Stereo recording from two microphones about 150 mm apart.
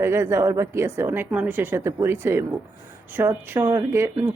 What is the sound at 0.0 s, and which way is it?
Speech, 15° right (ahead or behind).